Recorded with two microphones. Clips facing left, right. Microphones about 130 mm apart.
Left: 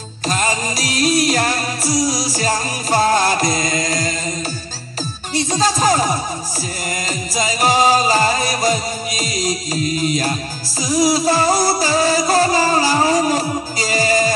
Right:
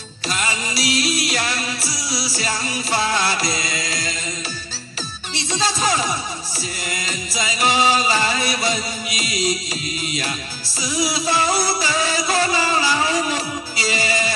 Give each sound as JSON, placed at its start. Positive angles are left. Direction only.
{"t": 0.3, "sound": "music", "side_deg": 40}
{"t": 5.3, "sound": "music", "side_deg": 45}
{"t": 7.3, "sound": "music", "side_deg": 40}